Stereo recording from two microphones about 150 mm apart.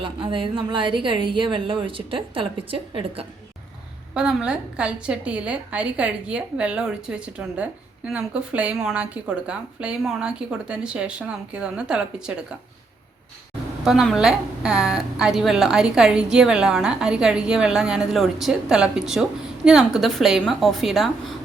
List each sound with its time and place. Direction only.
0.0 s a woman's voice: 35° right (ahead or behind)
4.1 s a woman's voice: 5° right (ahead or behind)
13.8 s a woman's voice: 5° right (ahead or behind)